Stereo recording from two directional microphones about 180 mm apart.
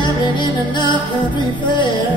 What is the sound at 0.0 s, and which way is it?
Music, 25° left (ahead or behind).